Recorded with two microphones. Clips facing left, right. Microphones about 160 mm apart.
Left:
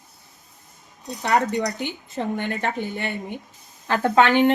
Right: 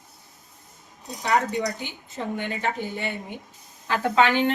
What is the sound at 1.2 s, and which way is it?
Speech, 50° left (ahead or behind).